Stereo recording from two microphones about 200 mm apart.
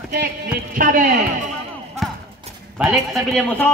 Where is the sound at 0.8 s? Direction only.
40° right (ahead or behind).